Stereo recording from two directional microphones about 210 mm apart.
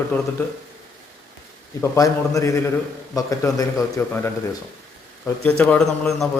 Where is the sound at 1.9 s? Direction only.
15° left (ahead or behind).